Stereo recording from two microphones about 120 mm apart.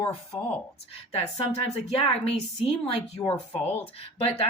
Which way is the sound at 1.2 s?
60° left (ahead or behind).